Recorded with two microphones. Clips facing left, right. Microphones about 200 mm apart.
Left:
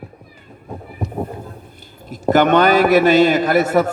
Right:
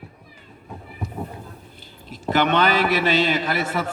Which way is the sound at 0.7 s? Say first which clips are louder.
Left 6 dB; 50° left (ahead or behind).